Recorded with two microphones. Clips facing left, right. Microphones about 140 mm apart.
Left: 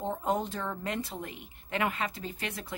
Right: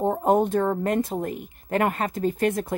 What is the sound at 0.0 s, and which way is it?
Speech, 50° right (ahead or behind).